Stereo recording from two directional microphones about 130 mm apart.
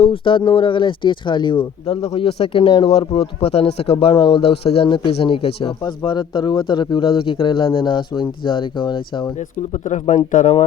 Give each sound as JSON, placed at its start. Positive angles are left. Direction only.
{"t": 0.0, "sound": "speech", "side_deg": 45}
{"t": 4.1, "sound": "speech", "side_deg": 40}
{"t": 9.4, "sound": "speech", "side_deg": 70}